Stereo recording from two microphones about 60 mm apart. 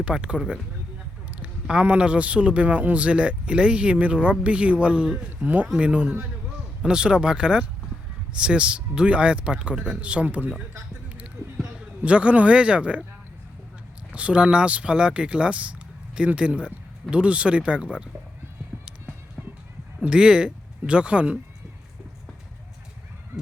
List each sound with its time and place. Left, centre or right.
0.0 s a man's voice: centre
12.0 s a man's voice: centre
14.1 s a man's voice: centre
20.0 s speech: centre